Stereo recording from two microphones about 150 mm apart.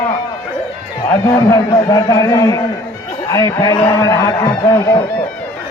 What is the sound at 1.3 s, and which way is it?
Speech, 20° left (ahead or behind).